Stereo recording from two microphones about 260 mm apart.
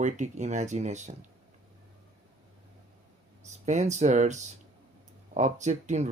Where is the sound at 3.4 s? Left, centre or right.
Right.